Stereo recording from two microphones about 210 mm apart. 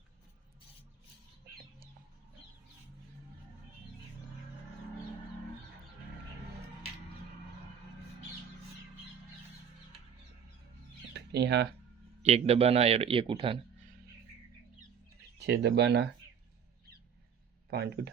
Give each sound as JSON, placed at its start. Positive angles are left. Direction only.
{"t": 11.1, "sound": "a sound", "side_deg": -55}
{"t": 12.2, "sound": "a man's voice", "side_deg": -30}
{"t": 15.4, "sound": "speech", "side_deg": -55}
{"t": 17.7, "sound": "speech", "side_deg": -50}